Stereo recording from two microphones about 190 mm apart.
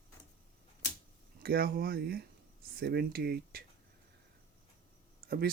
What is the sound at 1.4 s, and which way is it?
Speech, 55° right (ahead or behind).